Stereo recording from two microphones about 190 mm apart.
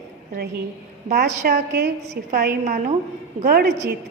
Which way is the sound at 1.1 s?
60° right (ahead or behind).